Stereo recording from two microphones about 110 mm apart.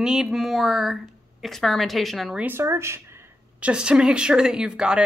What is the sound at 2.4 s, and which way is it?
Speech, 20° right (ahead or behind).